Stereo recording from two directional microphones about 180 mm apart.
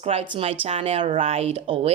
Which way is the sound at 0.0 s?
35° right (ahead or behind).